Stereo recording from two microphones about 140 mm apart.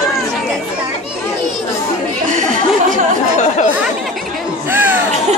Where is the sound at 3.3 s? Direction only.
60° left (ahead or behind).